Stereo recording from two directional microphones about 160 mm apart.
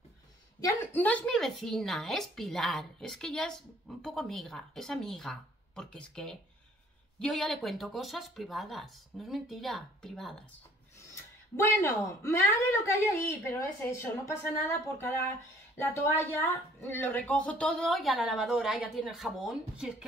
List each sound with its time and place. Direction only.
0.6 s a woman's voice: 20° left (ahead or behind)
1.0 s speech: 5° left (ahead or behind)
11.5 s speech: 20° left (ahead or behind); by 20.1 s 5° right (ahead or behind)